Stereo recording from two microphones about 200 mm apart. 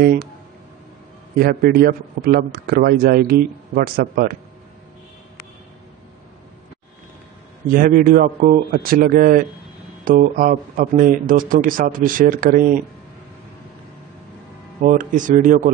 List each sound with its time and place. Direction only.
0.0 s a man's voice: 50° right (ahead or behind)
1.4 s a man's voice: 50° right (ahead or behind)
7.7 s a man's voice: 45° right (ahead or behind)
14.8 s speech: 40° right (ahead or behind)